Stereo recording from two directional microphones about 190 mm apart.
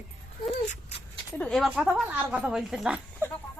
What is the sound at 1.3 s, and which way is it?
A woman's voice, 5° left (ahead or behind).